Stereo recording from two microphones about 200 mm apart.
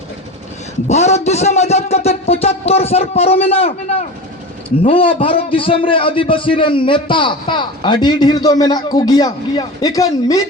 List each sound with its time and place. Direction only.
0.9 s a man's voice: 35° left (ahead or behind); by 10.4 s 15° left (ahead or behind)